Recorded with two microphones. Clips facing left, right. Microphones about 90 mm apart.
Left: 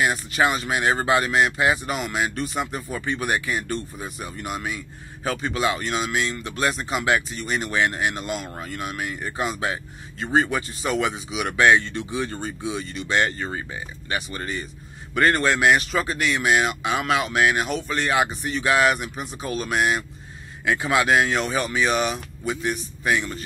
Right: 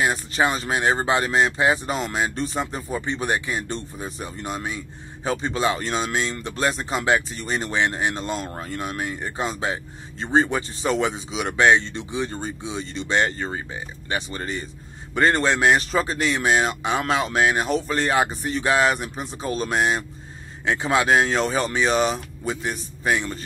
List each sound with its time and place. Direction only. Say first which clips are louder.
0.0 s speech: even; 30° right (ahead or behind)